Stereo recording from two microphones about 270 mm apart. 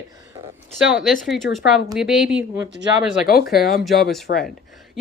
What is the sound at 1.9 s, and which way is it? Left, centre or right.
Speech, centre.